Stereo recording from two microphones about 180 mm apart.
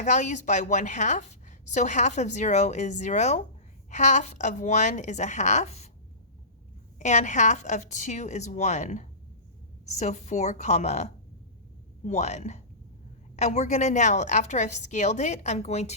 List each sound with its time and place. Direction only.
0.0 s a woman's voice: 40° left (ahead or behind)
7.0 s a woman's voice: 40° left (ahead or behind)